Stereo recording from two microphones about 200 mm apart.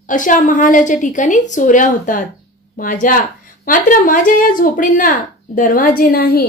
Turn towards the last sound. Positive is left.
turn(degrees=50)  # may be behind; listen again after turning